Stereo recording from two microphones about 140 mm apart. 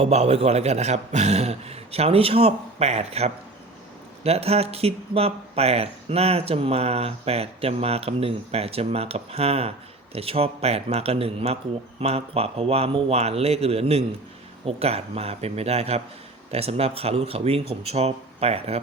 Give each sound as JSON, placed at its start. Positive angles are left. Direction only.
{"t": 0.0, "sound": "speech", "side_deg": -50}